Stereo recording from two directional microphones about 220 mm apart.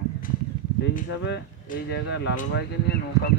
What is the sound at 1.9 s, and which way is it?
Speech, 50° left (ahead or behind).